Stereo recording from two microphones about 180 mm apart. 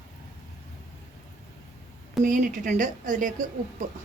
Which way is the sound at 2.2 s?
50° right (ahead or behind).